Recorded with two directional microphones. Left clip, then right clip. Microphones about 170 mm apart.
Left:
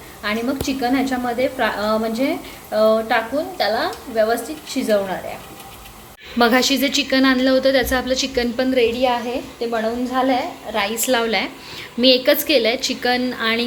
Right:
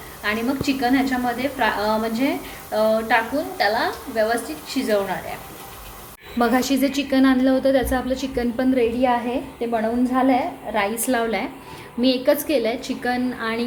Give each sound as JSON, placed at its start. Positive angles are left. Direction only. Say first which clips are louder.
{"t": 0.2, "sound": "a woman's voice", "louder": "left 1 dB", "side_deg": 20}
{"t": 6.4, "sound": "a woman's voice", "louder": "left 4 dB", "side_deg": -5}
{"t": 10.8, "sound": "a woman's voice", "louder": "left 3 dB", "side_deg": -5}